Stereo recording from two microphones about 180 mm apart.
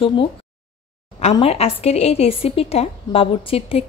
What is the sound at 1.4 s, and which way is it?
Speech, 35° left (ahead or behind).